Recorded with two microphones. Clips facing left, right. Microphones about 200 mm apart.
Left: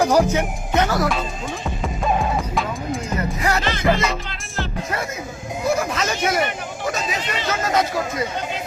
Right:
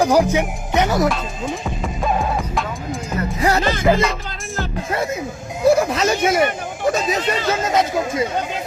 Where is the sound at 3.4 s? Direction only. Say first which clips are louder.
Right 6 dB; 35° right (ahead or behind).